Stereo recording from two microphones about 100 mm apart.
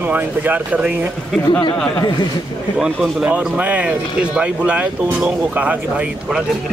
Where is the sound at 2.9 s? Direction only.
Centre (ahead or behind).